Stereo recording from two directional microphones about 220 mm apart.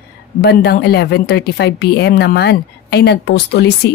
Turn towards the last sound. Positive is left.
turn(degrees=50)  # may be behind; listen again after turning